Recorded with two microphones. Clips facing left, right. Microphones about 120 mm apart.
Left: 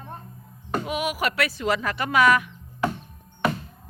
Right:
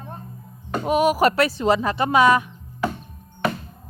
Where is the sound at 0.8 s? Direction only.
35° right (ahead or behind).